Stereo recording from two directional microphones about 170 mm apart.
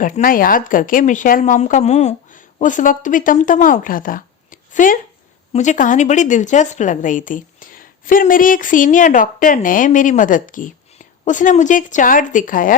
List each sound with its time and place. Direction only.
0.0 s a woman's voice: 55° left (ahead or behind)